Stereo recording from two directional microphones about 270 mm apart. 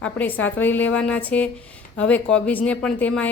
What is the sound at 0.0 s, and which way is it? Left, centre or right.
A woman's voice, centre.